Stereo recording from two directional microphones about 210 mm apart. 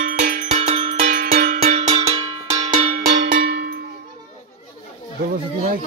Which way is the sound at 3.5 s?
50° right (ahead or behind).